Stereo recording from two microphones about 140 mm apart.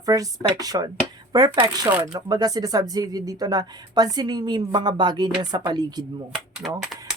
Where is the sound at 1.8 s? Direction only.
15° right (ahead or behind).